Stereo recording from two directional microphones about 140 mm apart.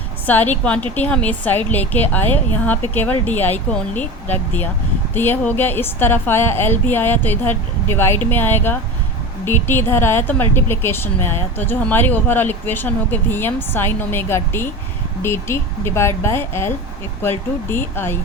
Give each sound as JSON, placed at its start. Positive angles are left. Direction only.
{"t": 0.3, "sound": "a woman's voice", "side_deg": 10}